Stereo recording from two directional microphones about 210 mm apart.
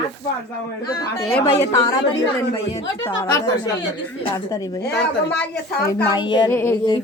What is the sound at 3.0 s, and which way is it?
Speech, 15° left (ahead or behind).